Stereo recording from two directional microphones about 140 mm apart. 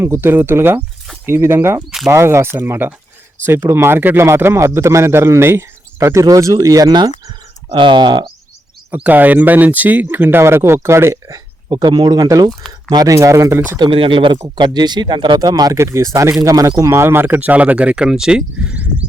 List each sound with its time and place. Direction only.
0.0 s speech: 15° right (ahead or behind); by 8.3 s 35° right (ahead or behind)
9.0 s speech: 10° right (ahead or behind)
13.7 s speech: 35° right (ahead or behind); by 19.0 s 10° right (ahead or behind)